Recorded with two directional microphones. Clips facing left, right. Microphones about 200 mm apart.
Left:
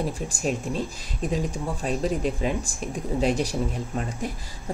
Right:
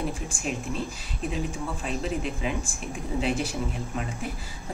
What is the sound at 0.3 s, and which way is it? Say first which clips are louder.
Speech: left 4 dB; 40° left (ahead or behind).